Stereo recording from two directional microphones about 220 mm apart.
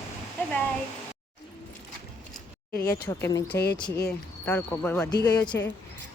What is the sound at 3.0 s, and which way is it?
Speech, 15° left (ahead or behind).